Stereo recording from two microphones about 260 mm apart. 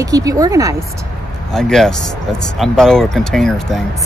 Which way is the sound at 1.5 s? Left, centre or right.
Centre.